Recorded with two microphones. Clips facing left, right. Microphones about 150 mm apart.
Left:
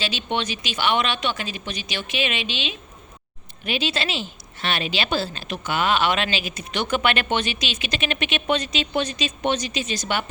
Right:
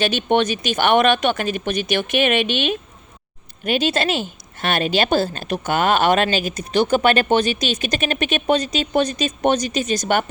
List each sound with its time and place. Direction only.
0.0 s a woman's voice: 55° right (ahead or behind)